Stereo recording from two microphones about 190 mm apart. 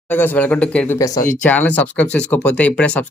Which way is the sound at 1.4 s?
10° left (ahead or behind).